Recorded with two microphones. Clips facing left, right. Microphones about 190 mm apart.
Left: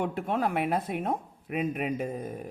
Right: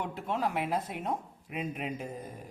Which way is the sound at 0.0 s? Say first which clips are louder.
Left 4 dB; 55° left (ahead or behind).